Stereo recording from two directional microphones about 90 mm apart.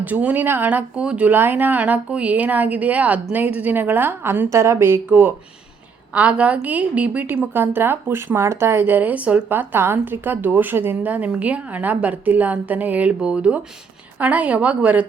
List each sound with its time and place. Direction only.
0.0 s a woman's voice: 15° right (ahead or behind)